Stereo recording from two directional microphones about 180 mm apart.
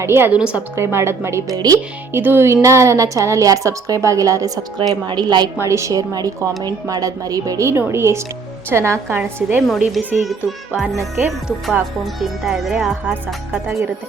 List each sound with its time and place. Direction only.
0.0 s a woman's voice: 15° right (ahead or behind)
9.6 s speech: centre (ahead or behind)